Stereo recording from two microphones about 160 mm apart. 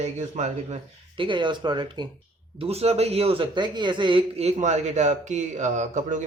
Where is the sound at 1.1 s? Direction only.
30° right (ahead or behind).